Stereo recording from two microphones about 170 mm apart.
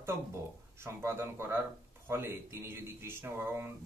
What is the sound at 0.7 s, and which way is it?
Speech, 15° right (ahead or behind).